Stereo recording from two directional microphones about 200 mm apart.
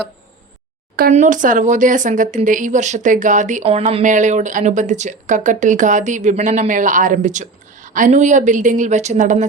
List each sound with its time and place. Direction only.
0.9 s speech: 40° right (ahead or behind)